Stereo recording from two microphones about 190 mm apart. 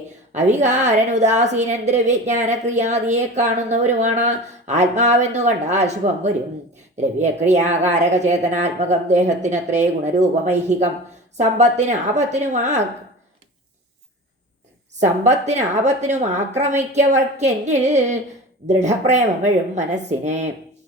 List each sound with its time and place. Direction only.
0.3 s a woman's voice: 35° right (ahead or behind)
15.0 s a woman's voice: 35° right (ahead or behind)